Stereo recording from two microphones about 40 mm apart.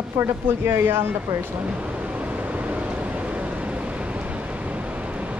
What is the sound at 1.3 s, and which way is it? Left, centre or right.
Speech, right.